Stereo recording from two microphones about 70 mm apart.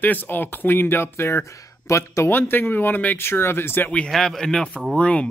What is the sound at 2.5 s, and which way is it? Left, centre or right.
Speech, left.